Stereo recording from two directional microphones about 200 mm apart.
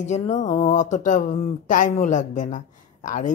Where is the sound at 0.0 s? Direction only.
35° left (ahead or behind).